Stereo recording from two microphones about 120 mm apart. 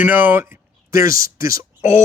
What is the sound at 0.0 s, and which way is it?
Speech, 15° right (ahead or behind).